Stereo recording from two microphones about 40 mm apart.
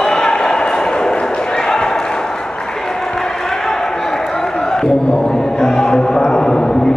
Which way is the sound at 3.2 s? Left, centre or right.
Centre.